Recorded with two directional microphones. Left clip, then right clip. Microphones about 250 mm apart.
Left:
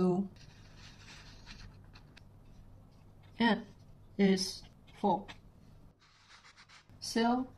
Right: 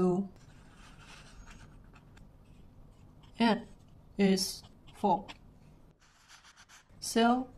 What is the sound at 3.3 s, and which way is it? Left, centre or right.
Speech, centre.